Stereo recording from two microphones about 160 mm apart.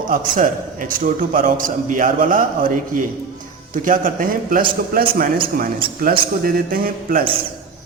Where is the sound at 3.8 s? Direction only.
55° right (ahead or behind).